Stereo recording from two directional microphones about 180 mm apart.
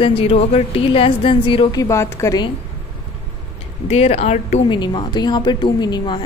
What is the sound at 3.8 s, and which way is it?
Speech, 35° left (ahead or behind).